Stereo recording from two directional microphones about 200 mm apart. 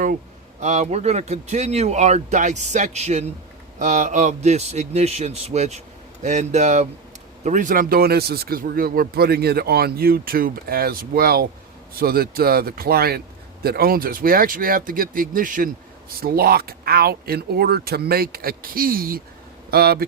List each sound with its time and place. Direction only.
0.6 s a man's voice: 35° right (ahead or behind); by 20.1 s 50° right (ahead or behind)